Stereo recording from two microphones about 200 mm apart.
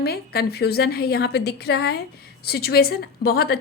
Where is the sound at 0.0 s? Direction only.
50° left (ahead or behind).